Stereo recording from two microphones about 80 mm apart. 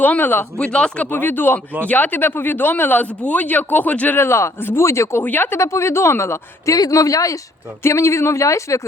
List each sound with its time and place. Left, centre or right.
0.0 s speech: left
0.6 s speech: centre
1.1 s speech: left
4.2 s speech: left
5.2 s speech: left
5.5 s speech: left
6.7 s speech: left